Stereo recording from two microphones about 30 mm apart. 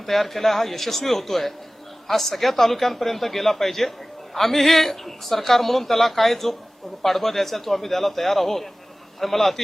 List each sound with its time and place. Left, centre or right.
0.0 s a man's voice: centre